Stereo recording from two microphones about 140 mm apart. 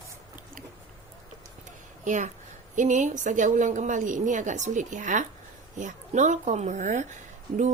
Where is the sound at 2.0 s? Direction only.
60° right (ahead or behind).